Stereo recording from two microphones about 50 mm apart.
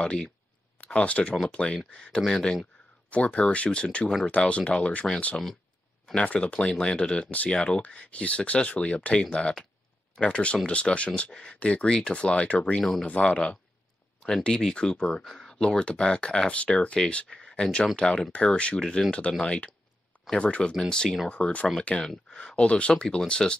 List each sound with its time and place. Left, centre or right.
0.0 s speech: centre
3.1 s speech: left
6.1 s speech: left
12.7 s speech: centre
13.0 s speech: left
21.3 s speech: left